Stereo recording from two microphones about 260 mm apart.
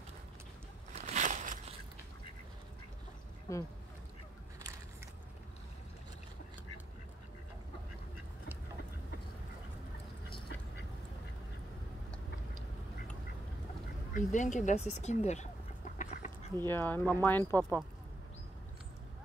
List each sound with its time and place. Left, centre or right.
0.9 s crushing: right
3.5 s speech: centre
14.1 s chicken: left
16.6 s speech: centre